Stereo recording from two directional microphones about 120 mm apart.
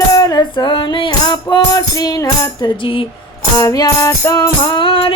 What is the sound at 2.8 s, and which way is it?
Speech, 45° left (ahead or behind).